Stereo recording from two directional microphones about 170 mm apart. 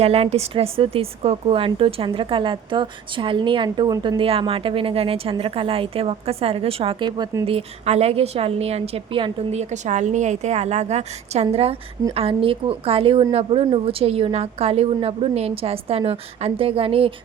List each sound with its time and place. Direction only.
0.0 s a woman's voice: 35° right (ahead or behind); by 4.2 s 20° right (ahead or behind)
4.2 s a woman's voice: 35° right (ahead or behind)